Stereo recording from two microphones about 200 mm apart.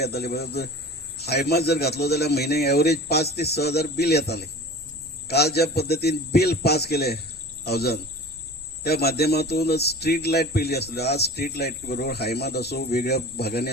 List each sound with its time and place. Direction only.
0.0 s speech: 55° left (ahead or behind)